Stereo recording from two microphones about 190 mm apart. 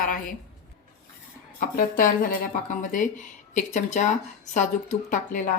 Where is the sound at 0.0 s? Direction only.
45° left (ahead or behind).